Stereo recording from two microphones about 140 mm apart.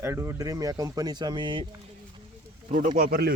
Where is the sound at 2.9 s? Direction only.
90° right.